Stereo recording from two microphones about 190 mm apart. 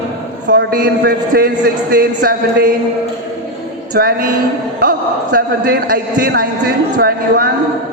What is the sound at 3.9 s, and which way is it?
Speech, 50° right (ahead or behind).